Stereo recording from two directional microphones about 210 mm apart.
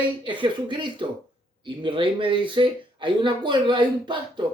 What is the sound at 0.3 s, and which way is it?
Speech, 25° right (ahead or behind).